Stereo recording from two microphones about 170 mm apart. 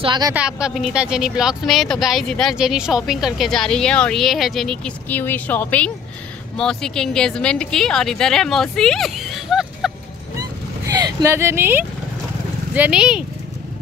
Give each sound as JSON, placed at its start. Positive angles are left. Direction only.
{"t": 0.0, "sound": "a woman's voice", "side_deg": -25}
{"t": 0.3, "sound": "speech", "side_deg": -5}
{"t": 10.9, "sound": "speech", "side_deg": -20}